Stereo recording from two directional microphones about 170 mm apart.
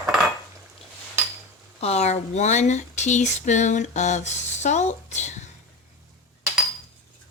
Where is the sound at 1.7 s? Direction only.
40° left (ahead or behind).